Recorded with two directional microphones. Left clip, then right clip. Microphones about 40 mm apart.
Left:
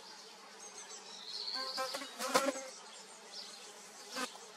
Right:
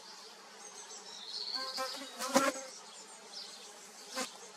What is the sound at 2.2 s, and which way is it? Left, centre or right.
Insect, left.